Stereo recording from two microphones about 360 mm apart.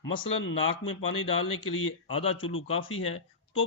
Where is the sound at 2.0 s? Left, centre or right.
Centre.